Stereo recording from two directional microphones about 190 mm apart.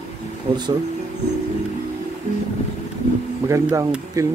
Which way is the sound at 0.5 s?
30° right (ahead or behind).